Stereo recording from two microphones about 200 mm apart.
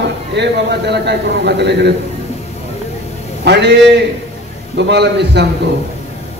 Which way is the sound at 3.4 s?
60° right (ahead or behind).